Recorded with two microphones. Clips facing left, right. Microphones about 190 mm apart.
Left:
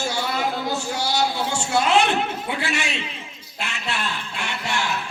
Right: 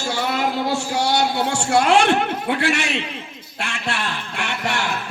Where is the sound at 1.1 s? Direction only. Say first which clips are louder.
Right 2 dB; 65° right (ahead or behind).